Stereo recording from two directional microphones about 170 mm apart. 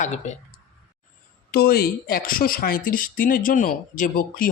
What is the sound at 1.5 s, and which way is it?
A man's voice, 65° left (ahead or behind).